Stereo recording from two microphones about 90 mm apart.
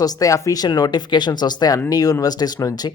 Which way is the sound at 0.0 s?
40° left (ahead or behind).